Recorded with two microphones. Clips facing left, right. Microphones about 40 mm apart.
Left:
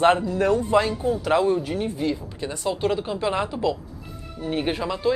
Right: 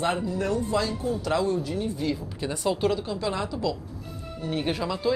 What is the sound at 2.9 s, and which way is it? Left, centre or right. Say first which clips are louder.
Speech: left 3 dB; left.